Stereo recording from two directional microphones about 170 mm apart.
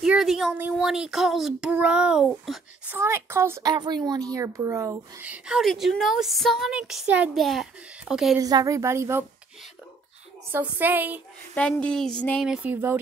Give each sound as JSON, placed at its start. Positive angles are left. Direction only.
{"t": 0.0, "sound": "a child's voice", "side_deg": -5}
{"t": 3.0, "sound": "a child's voice", "side_deg": -15}
{"t": 5.3, "sound": "a child's voice", "side_deg": -5}
{"t": 8.4, "sound": "a woman's voice", "side_deg": -20}
{"t": 10.5, "sound": "a child's voice", "side_deg": -10}
{"t": 11.5, "sound": "a child's voice", "side_deg": 5}
{"t": 12.4, "sound": "a child's voice", "side_deg": -5}